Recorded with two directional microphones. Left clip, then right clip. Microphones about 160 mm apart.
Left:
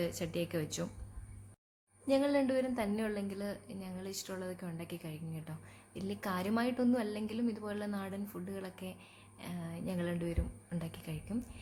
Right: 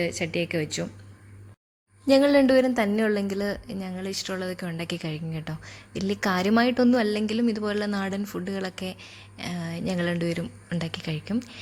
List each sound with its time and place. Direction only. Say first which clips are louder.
0.0 s speech: right 10 dB; 15° right (ahead or behind)
2.0 s a woman's voice: right 12 dB; 60° right (ahead or behind); by 11.6 s 45° right (ahead or behind)